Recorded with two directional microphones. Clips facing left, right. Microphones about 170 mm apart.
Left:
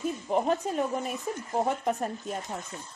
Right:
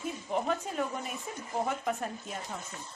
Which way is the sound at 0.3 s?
40° left (ahead or behind).